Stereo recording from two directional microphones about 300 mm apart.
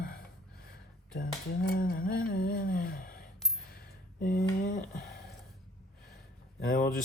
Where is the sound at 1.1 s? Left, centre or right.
Left.